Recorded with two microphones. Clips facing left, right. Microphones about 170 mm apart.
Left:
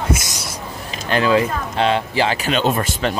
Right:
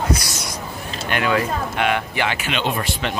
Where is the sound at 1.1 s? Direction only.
30° left (ahead or behind).